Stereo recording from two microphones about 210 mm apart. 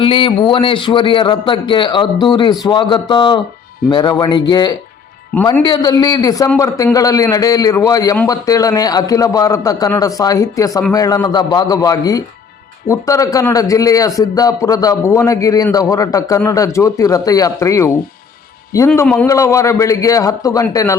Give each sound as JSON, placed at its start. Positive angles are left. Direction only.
{"t": 0.0, "sound": "a man's voice", "side_deg": 25}